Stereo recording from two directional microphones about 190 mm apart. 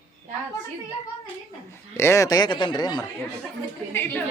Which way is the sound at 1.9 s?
15° left (ahead or behind).